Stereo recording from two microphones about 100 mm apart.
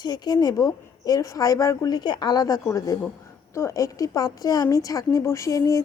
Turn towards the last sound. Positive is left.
turn(degrees=35)  # may be behind; listen again after turning